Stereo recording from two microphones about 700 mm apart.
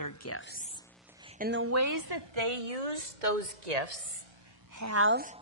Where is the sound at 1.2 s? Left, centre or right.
Centre; by 4.0 s right.